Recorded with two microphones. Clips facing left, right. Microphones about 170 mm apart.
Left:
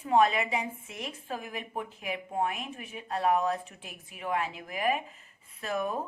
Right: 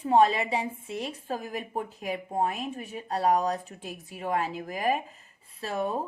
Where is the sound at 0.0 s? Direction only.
35° right (ahead or behind).